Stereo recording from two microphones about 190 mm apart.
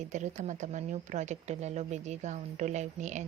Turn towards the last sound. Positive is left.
turn(degrees=-40)  # may be behind; listen again after turning